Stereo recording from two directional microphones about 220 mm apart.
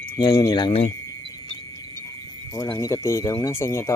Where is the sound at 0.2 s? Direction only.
20° left (ahead or behind).